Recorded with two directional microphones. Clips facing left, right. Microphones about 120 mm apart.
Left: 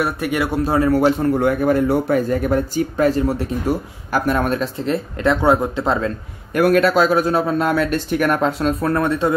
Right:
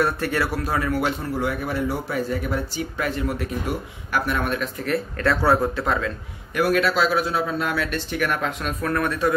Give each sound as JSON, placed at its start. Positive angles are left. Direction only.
{"t": 0.0, "sound": "speech", "side_deg": 15}
{"t": 0.5, "sound": "speech", "side_deg": 30}
{"t": 1.2, "sound": "speech", "side_deg": 55}
{"t": 4.7, "sound": "speech", "side_deg": 25}
{"t": 6.5, "sound": "speech", "side_deg": 50}